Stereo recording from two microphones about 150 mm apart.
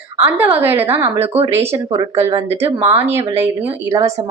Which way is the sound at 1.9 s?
35° right (ahead or behind).